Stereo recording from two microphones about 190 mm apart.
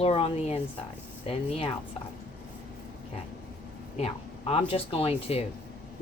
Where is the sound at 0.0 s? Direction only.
30° left (ahead or behind).